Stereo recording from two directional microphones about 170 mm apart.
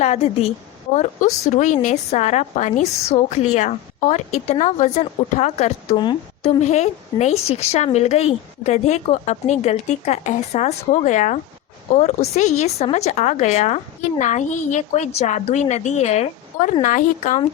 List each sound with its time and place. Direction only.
0.0 s speech: 35° left (ahead or behind)
0.9 s a woman's voice: 45° left (ahead or behind)